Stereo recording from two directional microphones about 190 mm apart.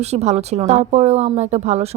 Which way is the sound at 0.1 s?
35° right (ahead or behind).